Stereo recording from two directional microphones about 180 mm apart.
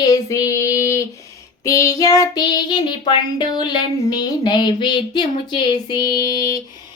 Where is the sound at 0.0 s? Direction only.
20° left (ahead or behind).